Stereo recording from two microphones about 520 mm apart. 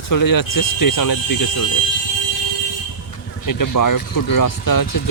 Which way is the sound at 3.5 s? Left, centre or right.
Left.